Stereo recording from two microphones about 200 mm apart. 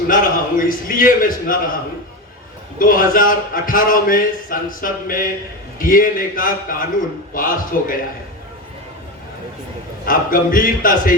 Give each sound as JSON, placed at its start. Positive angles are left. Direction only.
{"t": 0.1, "sound": "a man's voice", "side_deg": 45}
{"t": 2.7, "sound": "a man's voice", "side_deg": 45}
{"t": 10.1, "sound": "a man's voice", "side_deg": 45}